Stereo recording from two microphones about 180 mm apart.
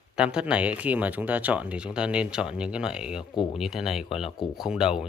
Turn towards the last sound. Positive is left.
turn(degrees=-5)  # may be behind; listen again after turning